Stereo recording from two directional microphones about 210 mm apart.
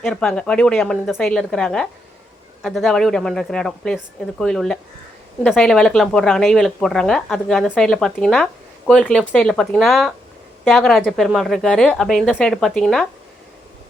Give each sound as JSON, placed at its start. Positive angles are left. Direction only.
{"t": 0.0, "sound": "speech", "side_deg": 0}